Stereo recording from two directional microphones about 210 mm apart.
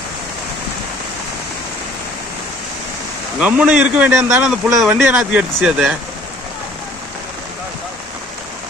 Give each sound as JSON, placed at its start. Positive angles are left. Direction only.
{"t": 3.4, "sound": "speech", "side_deg": -5}